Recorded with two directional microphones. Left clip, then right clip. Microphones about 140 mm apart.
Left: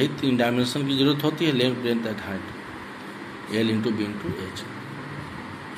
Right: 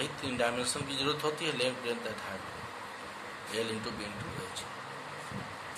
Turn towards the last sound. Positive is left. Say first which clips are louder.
# left 10 dB
turn(degrees=20)  # may be behind; listen again after turning